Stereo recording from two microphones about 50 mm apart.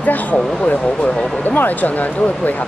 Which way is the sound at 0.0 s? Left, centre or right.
Left.